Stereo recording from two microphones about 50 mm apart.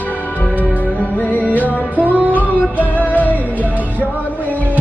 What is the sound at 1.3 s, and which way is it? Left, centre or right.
Music, left.